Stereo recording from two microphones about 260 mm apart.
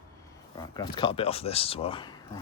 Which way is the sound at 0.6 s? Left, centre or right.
Centre.